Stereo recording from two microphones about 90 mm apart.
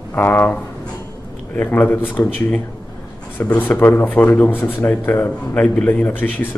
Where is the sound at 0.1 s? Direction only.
20° left (ahead or behind).